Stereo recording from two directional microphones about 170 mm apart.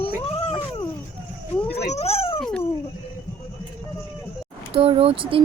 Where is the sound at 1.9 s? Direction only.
40° left (ahead or behind).